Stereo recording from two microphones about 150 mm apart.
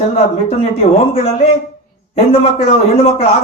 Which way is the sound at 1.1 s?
45° left (ahead or behind).